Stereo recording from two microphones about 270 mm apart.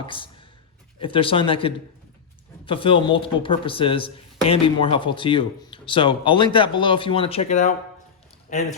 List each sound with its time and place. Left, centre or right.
0.0 s speech: centre